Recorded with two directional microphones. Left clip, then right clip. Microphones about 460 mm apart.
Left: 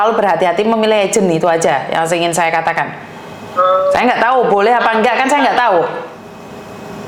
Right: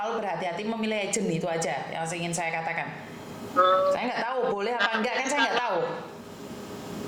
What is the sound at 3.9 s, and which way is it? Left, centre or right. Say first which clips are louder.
Speech: left 16 dB; left.